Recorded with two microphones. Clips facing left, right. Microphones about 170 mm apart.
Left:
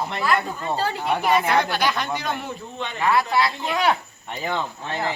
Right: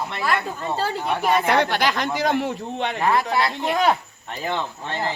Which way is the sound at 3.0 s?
40° right (ahead or behind).